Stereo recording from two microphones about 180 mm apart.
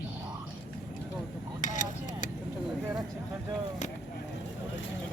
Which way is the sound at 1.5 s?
45° left (ahead or behind).